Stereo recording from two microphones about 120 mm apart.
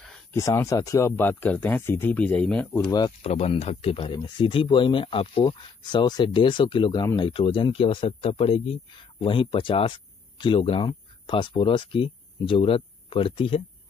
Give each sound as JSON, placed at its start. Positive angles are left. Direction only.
{"t": 0.3, "sound": "speech", "side_deg": 25}
{"t": 3.2, "sound": "speech", "side_deg": 55}